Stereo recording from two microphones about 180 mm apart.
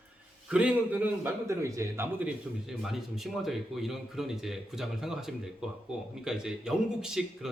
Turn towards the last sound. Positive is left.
turn(degrees=-5)  # may be behind; listen again after turning